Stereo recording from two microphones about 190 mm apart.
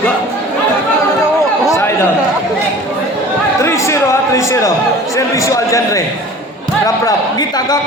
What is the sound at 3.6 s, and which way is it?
A man's voice, 15° left (ahead or behind).